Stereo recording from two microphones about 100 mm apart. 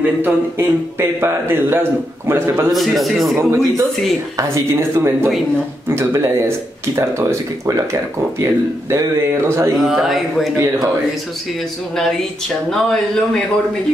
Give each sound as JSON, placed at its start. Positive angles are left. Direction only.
{"t": 0.2, "sound": "a man's voice", "side_deg": -25}
{"t": 2.7, "sound": "speech", "side_deg": 0}
{"t": 3.3, "sound": "a man's voice", "side_deg": -30}
{"t": 9.8, "sound": "speech", "side_deg": 0}
{"t": 12.0, "sound": "speech", "side_deg": 5}